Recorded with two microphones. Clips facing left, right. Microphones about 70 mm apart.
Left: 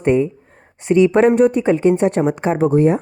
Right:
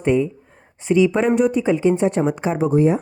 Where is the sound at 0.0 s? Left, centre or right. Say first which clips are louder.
Left 3 dB; left.